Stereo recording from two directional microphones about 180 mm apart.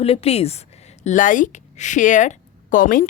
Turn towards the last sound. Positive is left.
turn(degrees=50)  # may be behind; listen again after turning